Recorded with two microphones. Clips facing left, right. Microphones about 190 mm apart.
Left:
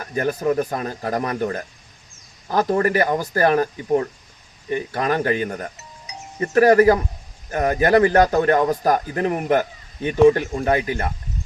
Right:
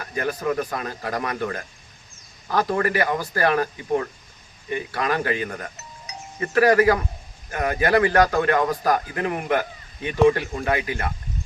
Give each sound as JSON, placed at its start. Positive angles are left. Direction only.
{"t": 0.0, "sound": "speech", "side_deg": 40}
{"t": 2.8, "sound": "speech", "side_deg": 40}